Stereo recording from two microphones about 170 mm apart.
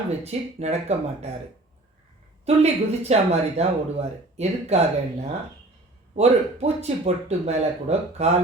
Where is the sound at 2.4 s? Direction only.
40° right (ahead or behind).